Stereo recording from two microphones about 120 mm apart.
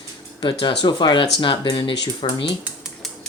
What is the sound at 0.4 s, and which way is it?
Speech, 40° left (ahead or behind).